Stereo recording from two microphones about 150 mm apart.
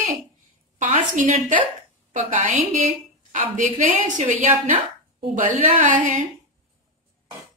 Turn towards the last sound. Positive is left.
turn(degrees=-60)  # may be behind; listen again after turning